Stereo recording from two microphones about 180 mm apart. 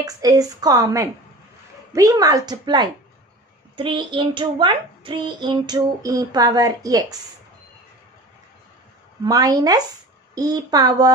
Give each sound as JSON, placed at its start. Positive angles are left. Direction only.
{"t": 0.0, "sound": "a child's voice", "side_deg": -20}
{"t": 9.2, "sound": "a child's voice", "side_deg": -20}